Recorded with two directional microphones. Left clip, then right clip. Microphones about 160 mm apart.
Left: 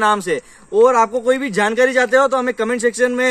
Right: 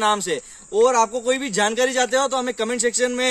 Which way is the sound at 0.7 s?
10° right (ahead or behind).